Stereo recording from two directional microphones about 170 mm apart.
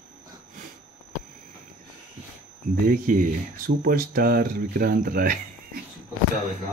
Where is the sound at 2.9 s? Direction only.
55° right (ahead or behind).